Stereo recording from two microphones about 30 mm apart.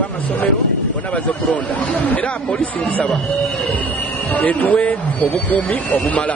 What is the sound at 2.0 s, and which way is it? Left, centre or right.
Speech, left.